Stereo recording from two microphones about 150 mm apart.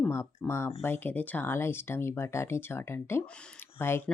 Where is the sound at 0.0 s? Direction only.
15° left (ahead or behind).